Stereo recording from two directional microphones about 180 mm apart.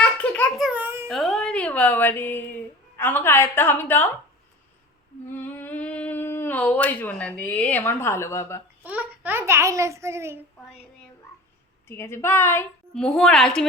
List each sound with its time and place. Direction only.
0.0 s babbling: 5° left (ahead or behind)
0.7 s babbling: 10° right (ahead or behind)
1.0 s a woman's voice: centre (ahead or behind)
5.4 s speech: 10° left (ahead or behind)
8.8 s a child's voice: 10° right (ahead or behind)
11.9 s a woman's voice: 15° left (ahead or behind)